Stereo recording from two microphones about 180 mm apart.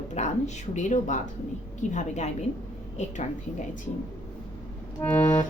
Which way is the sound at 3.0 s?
40° left (ahead or behind).